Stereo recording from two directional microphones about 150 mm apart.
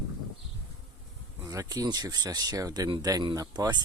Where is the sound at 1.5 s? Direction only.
25° right (ahead or behind).